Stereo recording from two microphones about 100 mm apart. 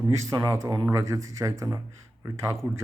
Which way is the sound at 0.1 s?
35° right (ahead or behind).